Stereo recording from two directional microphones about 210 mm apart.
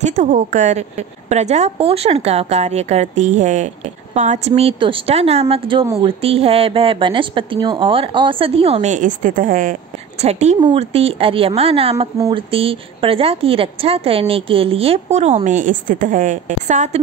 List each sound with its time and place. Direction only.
0.0 s a woman's voice: 35° right (ahead or behind)
10.2 s a woman's voice: 30° right (ahead or behind)